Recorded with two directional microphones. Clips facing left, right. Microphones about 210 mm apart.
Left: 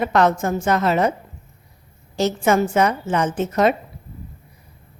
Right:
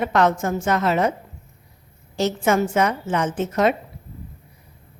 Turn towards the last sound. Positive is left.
turn(degrees=35)  # may be behind; listen again after turning